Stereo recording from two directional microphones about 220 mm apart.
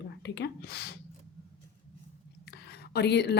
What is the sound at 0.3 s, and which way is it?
Speech, 50° left (ahead or behind).